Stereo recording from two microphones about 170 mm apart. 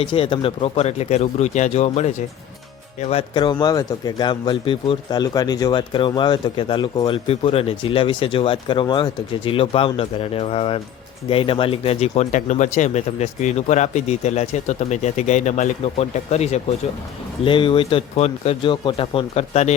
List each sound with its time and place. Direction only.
0.0 s speech: 30° left (ahead or behind)